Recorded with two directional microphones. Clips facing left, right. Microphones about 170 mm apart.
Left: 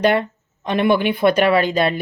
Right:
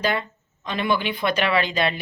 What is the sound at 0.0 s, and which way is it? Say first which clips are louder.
A woman's voice: left 8 dB; 60° left (ahead or behind).